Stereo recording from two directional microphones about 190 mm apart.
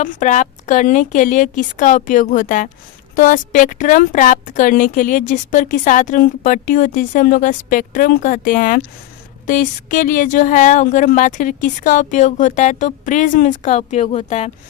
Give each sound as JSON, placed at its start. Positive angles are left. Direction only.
{"t": 0.0, "sound": "a woman's voice", "side_deg": 40}